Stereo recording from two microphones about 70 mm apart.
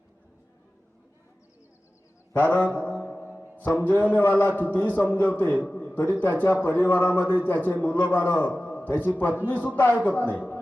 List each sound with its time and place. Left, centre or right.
2.3 s a man's voice: left